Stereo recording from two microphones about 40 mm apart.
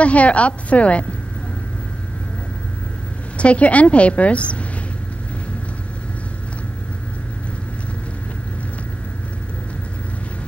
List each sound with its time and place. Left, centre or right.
0.0 s a woman's voice: left
3.3 s a woman's voice: left